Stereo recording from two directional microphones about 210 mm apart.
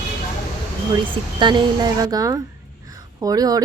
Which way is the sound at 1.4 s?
20° right (ahead or behind).